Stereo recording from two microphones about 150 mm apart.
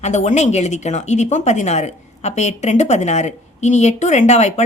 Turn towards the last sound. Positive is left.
turn(degrees=50)  # may be behind; listen again after turning